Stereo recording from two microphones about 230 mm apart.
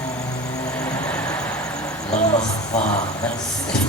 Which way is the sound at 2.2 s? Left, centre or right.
Left.